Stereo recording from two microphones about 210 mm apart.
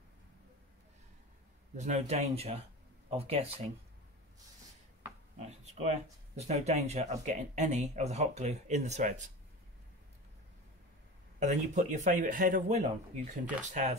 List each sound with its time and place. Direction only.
1.8 s speech: 35° right (ahead or behind)
5.4 s speech: 30° right (ahead or behind)
11.3 s speech: 35° right (ahead or behind)